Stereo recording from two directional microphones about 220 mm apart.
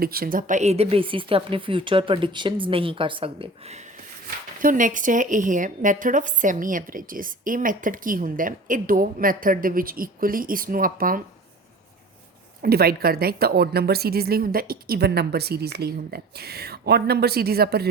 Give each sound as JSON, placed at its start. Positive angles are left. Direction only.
{"t": 0.0, "sound": "speech", "side_deg": -45}
{"t": 4.6, "sound": "speech", "side_deg": -35}
{"t": 12.6, "sound": "a woman's voice", "side_deg": -45}